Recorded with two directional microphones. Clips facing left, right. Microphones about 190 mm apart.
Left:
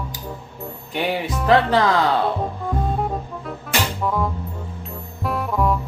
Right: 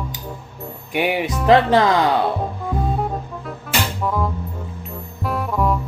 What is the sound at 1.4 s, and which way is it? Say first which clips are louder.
Speech: right 3 dB; 20° right (ahead or behind).